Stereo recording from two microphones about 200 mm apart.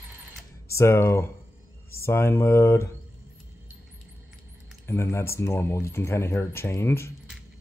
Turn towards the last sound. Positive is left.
turn(degrees=10)  # may be behind; listen again after turning